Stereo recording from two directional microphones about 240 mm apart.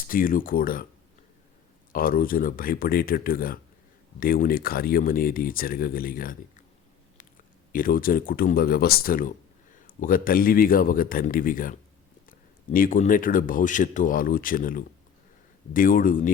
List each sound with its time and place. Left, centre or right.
0.1 s speech: left
1.9 s speech: left
7.7 s speech: left
12.7 s speech: left